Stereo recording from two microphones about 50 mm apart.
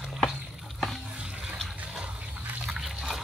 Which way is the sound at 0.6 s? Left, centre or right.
Centre.